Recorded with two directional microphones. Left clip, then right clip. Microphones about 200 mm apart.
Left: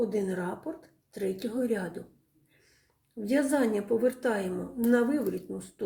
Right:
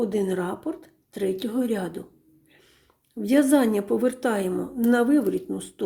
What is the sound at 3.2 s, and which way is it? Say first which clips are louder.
A woman's voice: right 7 dB; 30° right (ahead or behind).